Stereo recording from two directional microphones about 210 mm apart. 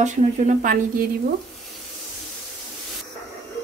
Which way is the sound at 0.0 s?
35° right (ahead or behind).